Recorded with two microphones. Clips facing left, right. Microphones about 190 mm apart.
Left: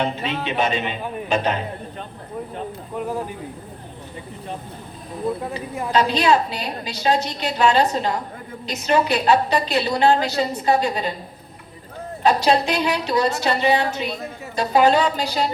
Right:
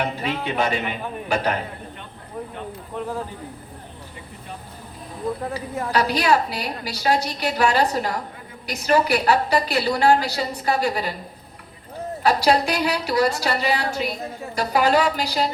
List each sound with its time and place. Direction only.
0.0 s a woman's voice: 20° left (ahead or behind)
5.9 s a woman's voice: 25° left (ahead or behind)
12.2 s a woman's voice: 20° left (ahead or behind)